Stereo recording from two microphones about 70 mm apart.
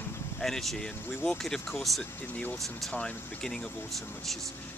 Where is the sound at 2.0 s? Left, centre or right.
Centre.